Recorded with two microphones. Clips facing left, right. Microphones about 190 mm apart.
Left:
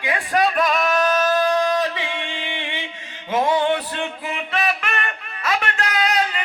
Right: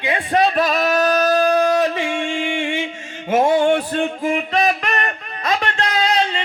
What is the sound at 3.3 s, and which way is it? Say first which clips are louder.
Music: right 4 dB; 45° right (ahead or behind).